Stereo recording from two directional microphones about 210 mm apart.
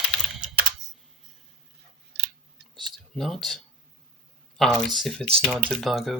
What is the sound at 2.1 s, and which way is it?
Scissors, 55° right (ahead or behind).